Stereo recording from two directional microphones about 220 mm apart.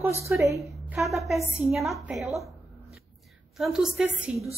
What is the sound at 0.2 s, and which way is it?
A woman's voice, 15° right (ahead or behind).